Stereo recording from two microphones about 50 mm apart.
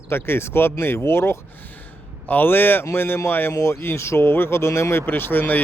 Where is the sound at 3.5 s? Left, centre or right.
Left.